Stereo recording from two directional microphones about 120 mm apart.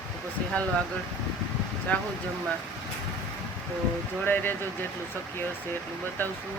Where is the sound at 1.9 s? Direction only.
10° left (ahead or behind).